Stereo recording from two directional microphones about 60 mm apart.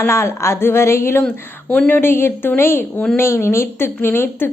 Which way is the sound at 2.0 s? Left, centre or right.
Left.